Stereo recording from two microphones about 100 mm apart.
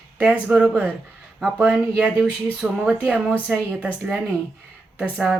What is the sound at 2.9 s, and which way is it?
Speech, 15° right (ahead or behind).